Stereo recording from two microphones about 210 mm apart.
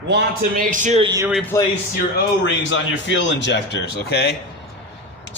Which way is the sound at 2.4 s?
60° left (ahead or behind).